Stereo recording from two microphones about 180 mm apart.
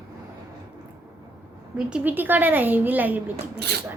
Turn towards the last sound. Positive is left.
turn(degrees=-65)  # may be behind; listen again after turning